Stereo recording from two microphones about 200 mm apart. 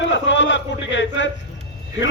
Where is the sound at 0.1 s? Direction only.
65° left (ahead or behind).